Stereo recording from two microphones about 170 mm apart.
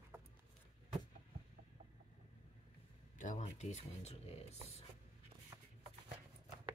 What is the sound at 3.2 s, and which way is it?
Speech, 45° left (ahead or behind).